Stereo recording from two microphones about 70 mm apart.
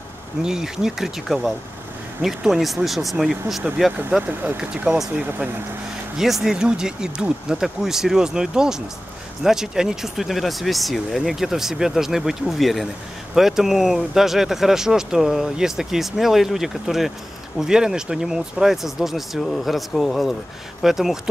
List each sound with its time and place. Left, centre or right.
0.4 s speech: centre
4.3 s speech: right
4.6 s speech: centre
6.1 s speech: centre